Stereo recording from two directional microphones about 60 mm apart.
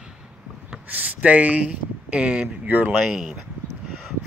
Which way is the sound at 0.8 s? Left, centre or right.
Right.